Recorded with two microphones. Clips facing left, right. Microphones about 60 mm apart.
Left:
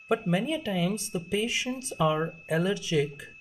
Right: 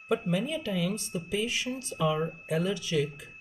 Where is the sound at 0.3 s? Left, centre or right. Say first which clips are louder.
Left 2 dB; left; by 2.1 s centre.